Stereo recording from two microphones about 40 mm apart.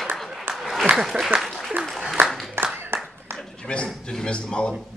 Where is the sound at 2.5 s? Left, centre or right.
Right.